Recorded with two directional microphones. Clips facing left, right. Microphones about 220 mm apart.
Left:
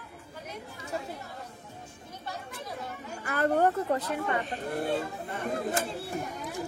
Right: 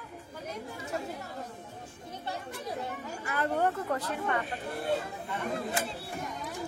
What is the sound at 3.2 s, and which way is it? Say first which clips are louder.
Speech: left 4 dB; 50° left (ahead or behind).